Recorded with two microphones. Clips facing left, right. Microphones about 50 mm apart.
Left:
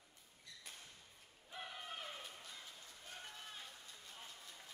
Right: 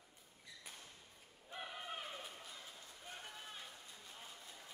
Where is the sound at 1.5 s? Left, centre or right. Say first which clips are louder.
Right 2 dB; centre.